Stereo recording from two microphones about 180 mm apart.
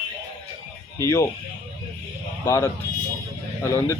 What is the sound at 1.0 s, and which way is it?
Speech, 15° left (ahead or behind).